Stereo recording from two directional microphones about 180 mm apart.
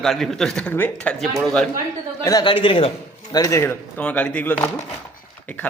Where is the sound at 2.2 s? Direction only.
25° left (ahead or behind).